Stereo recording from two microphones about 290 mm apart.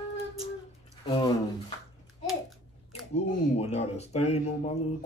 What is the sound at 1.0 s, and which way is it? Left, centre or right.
Speech, centre.